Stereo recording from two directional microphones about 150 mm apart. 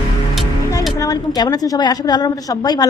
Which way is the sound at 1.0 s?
25° left (ahead or behind).